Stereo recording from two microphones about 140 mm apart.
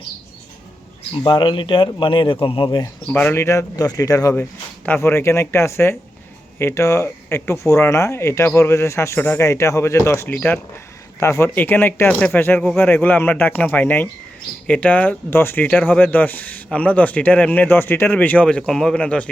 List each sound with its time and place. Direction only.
1.1 s speech: 35° left (ahead or behind)
3.1 s speech: 10° left (ahead or behind)